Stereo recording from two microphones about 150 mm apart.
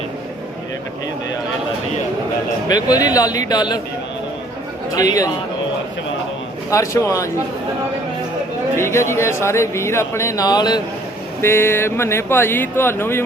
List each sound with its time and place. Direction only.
2.6 s speech: 25° left (ahead or behind)
4.9 s speech: 25° left (ahead or behind)
6.7 s speech: 20° left (ahead or behind)
8.7 s speech: 15° left (ahead or behind)
11.3 s speech: 15° left (ahead or behind)